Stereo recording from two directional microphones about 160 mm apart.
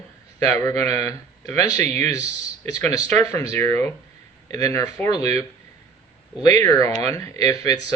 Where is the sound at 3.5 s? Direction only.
15° left (ahead or behind).